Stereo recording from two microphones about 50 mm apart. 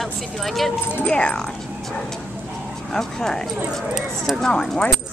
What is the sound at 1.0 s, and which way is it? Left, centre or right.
Speech, left.